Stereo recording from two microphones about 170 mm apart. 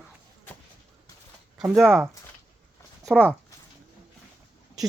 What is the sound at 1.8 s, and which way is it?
Speech, centre (ahead or behind).